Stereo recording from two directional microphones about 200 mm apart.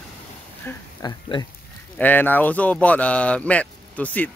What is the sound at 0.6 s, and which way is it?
Speech, 20° left (ahead or behind).